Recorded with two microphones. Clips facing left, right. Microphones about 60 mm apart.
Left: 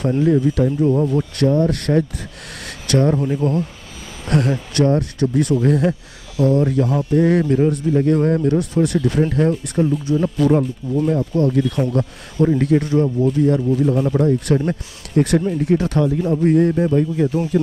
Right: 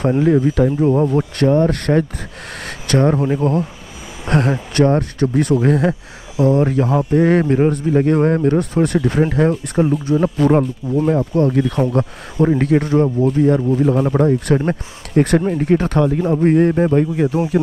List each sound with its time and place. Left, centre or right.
0.0 s speech: right
6.3 s speech: right
9.8 s speech: right
10.1 s speech: right